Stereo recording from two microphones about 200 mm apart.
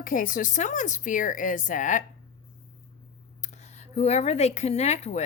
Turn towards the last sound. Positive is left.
turn(degrees=35)  # may be behind; listen again after turning